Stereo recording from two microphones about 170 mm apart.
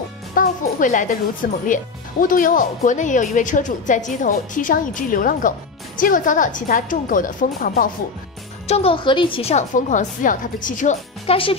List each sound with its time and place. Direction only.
0.3 s a woman's voice: 55° left (ahead or behind)
8.6 s a woman's voice: 35° left (ahead or behind)
11.2 s a woman's voice: 30° left (ahead or behind)